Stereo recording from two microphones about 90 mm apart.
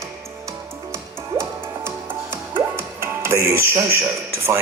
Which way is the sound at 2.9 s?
30° right (ahead or behind).